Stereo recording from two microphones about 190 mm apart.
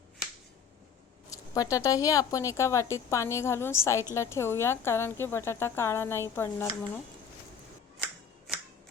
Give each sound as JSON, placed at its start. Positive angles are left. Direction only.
{"t": 1.3, "sound": "speech", "side_deg": 15}